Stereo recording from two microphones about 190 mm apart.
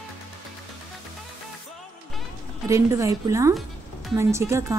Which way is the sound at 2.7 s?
15° right (ahead or behind).